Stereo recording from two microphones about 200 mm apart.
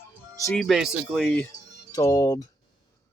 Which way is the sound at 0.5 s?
Centre (ahead or behind).